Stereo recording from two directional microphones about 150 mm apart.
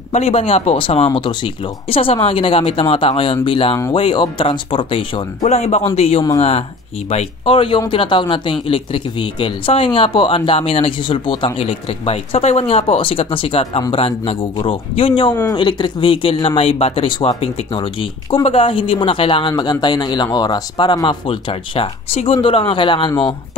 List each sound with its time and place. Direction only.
0.1 s speech: 40° left (ahead or behind)
5.4 s speech: 50° left (ahead or behind)